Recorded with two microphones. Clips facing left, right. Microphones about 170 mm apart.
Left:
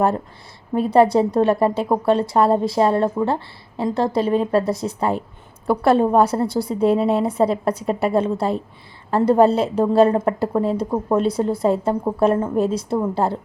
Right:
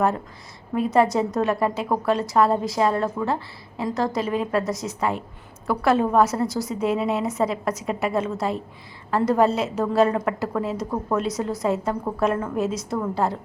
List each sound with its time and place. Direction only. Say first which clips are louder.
0.7 s a woman's voice: left 5 dB; 30° left (ahead or behind)